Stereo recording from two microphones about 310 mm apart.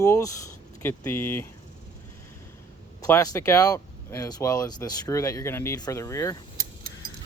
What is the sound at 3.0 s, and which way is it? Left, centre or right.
Speech, centre.